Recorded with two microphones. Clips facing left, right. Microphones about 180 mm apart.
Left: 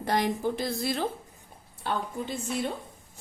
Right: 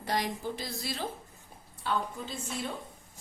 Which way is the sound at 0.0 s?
55° left (ahead or behind).